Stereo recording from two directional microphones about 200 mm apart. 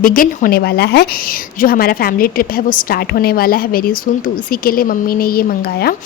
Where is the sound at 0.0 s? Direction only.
45° left (ahead or behind).